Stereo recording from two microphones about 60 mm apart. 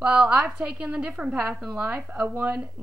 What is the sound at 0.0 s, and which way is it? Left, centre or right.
Speech, centre.